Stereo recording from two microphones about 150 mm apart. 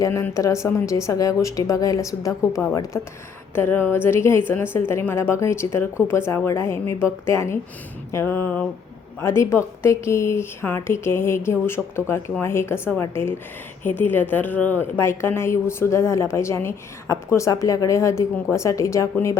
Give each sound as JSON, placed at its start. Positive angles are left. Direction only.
{"t": 0.0, "sound": "a woman's voice", "side_deg": 20}